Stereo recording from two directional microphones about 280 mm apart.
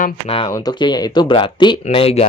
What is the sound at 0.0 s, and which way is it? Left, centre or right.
Speech, left.